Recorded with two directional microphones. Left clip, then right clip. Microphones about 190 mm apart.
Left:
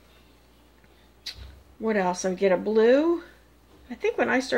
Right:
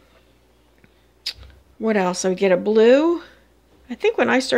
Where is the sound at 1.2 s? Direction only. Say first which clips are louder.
Right 8 dB; 40° right (ahead or behind).